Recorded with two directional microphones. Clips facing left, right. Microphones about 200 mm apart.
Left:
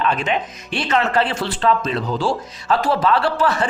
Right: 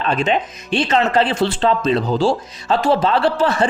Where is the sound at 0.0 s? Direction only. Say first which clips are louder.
Right 2 dB; 25° right (ahead or behind).